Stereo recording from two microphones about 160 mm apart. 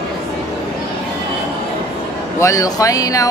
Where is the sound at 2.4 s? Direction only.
20° left (ahead or behind).